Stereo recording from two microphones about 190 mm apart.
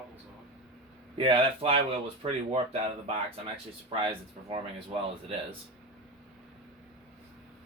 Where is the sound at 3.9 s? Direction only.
30° right (ahead or behind).